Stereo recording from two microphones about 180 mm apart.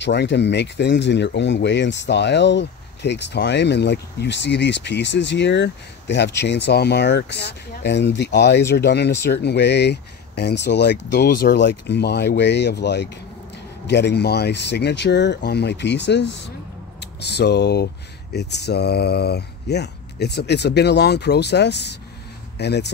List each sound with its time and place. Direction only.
0.0 s speech: 75° left (ahead or behind)